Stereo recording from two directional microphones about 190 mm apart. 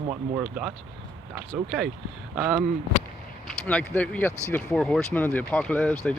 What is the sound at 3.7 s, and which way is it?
Speech, 5° left (ahead or behind).